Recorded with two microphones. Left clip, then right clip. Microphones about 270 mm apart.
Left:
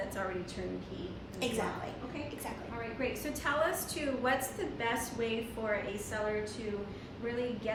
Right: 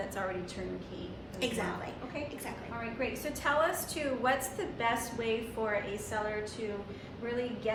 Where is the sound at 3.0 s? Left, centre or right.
Centre.